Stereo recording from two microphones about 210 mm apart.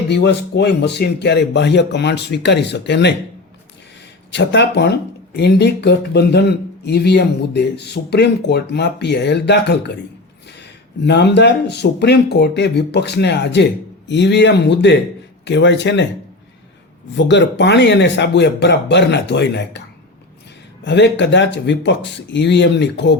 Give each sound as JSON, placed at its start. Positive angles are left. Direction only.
{"t": 0.1, "sound": "speech", "side_deg": 55}
{"t": 4.3, "sound": "speech", "side_deg": 55}
{"t": 17.2, "sound": "speech", "side_deg": 55}
{"t": 20.8, "sound": "speech", "side_deg": 55}